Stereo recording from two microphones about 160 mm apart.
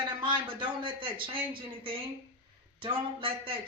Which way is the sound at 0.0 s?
30° right (ahead or behind).